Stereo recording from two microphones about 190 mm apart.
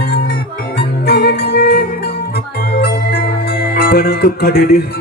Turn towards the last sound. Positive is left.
turn(degrees=55)  # may be behind; listen again after turning